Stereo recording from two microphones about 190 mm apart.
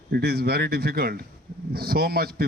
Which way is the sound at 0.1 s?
55° right (ahead or behind).